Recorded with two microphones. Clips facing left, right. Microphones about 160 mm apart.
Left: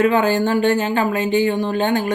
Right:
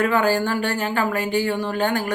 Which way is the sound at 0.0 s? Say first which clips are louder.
Left 3 dB; 20° left (ahead or behind).